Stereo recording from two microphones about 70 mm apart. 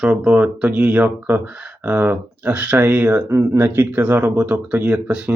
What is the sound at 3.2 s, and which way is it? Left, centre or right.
Speech, right.